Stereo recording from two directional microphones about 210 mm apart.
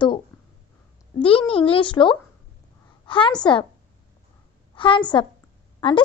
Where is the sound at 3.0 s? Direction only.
25° left (ahead or behind).